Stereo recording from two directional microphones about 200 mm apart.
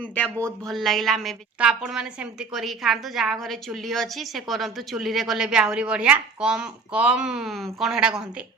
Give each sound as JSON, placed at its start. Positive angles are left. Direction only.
{"t": 0.0, "sound": "speech", "side_deg": 10}
{"t": 0.3, "sound": "speech", "side_deg": -15}
{"t": 0.7, "sound": "a woman's voice", "side_deg": 0}